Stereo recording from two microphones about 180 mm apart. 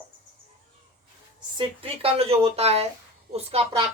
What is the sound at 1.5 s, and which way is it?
A woman's voice, 30° right (ahead or behind).